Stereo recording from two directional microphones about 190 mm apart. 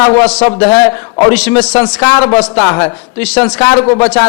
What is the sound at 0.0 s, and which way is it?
A man's voice, 10° left (ahead or behind).